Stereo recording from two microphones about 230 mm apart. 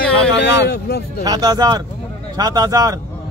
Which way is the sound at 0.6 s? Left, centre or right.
Left.